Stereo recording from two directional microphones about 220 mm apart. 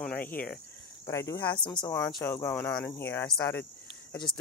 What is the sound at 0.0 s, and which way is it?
Cricket, 5° left (ahead or behind).